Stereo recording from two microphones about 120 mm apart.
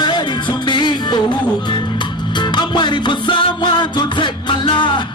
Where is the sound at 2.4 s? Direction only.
40° left (ahead or behind).